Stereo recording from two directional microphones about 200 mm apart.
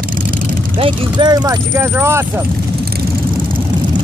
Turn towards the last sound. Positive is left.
turn(degrees=-10)  # may be behind; listen again after turning